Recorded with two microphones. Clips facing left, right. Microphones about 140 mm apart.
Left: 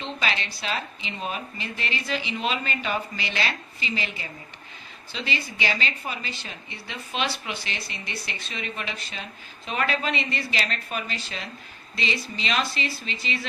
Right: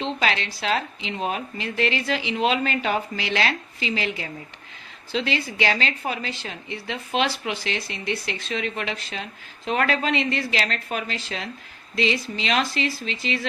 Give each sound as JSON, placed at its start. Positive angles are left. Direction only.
{"t": 0.0, "sound": "a woman's voice", "side_deg": -90}